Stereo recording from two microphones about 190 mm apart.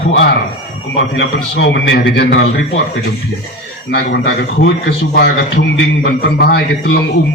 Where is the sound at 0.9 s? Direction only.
70° left (ahead or behind).